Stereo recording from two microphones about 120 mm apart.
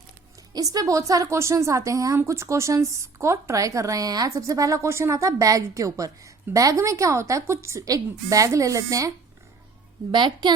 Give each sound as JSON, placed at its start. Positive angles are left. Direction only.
{"t": 0.5, "sound": "a woman's voice", "side_deg": -30}
{"t": 10.1, "sound": "a woman's voice", "side_deg": -40}